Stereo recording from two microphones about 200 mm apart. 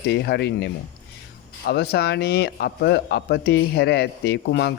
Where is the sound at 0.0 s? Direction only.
55° left (ahead or behind).